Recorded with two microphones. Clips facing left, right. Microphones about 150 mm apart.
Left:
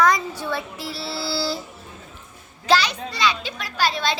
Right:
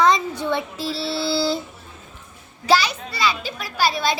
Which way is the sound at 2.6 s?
10° right (ahead or behind).